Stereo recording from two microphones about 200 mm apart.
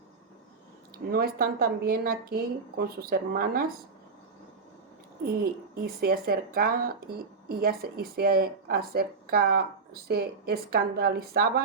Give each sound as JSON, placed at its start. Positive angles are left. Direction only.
{"t": 1.1, "sound": "speech", "side_deg": -50}
{"t": 5.2, "sound": "speech", "side_deg": -50}